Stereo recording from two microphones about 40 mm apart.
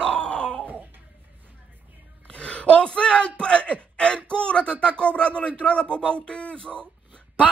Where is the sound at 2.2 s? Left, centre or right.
Left.